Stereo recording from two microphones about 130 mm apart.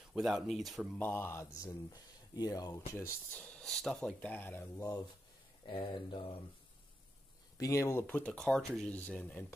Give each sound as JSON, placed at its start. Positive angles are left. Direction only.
{"t": 0.1, "sound": "speech", "side_deg": 0}
{"t": 0.9, "sound": "speech", "side_deg": 15}
{"t": 3.3, "sound": "speech", "side_deg": 10}
{"t": 4.7, "sound": "speech", "side_deg": 25}
{"t": 5.7, "sound": "speech", "side_deg": 40}
{"t": 7.5, "sound": "speech", "side_deg": 25}
{"t": 8.1, "sound": "speech", "side_deg": 10}